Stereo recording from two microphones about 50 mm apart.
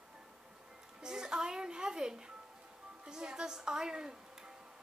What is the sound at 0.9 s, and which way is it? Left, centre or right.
A woman's voice, centre.